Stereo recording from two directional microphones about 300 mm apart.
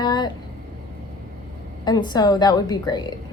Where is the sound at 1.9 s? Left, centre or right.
Centre.